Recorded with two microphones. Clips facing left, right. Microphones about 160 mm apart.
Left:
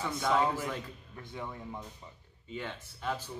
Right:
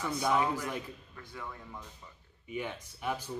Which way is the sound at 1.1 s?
20° left (ahead or behind).